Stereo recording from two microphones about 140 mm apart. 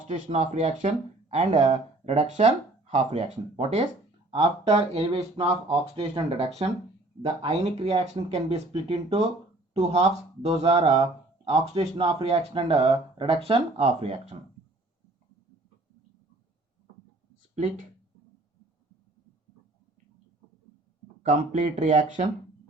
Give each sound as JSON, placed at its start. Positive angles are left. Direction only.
{"t": 0.1, "sound": "speech", "side_deg": -55}
{"t": 17.5, "sound": "speech", "side_deg": -55}
{"t": 21.2, "sound": "speech", "side_deg": -60}